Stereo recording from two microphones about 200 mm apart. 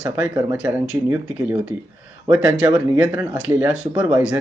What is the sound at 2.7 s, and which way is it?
Speech, 5° right (ahead or behind).